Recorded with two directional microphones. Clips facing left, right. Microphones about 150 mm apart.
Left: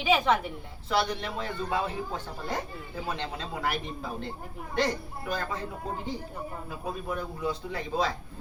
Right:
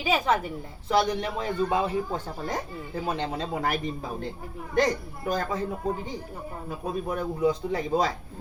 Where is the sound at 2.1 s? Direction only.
45° right (ahead or behind).